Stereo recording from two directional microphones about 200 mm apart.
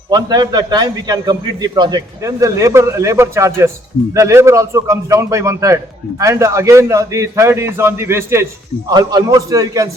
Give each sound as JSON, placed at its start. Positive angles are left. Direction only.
{"t": 0.1, "sound": "a man's voice", "side_deg": -20}